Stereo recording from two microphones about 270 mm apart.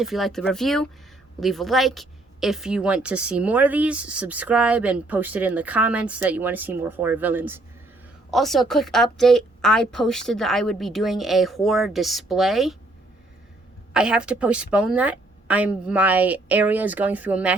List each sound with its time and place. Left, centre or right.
0.0 s a woman's voice: centre
13.9 s a woman's voice: centre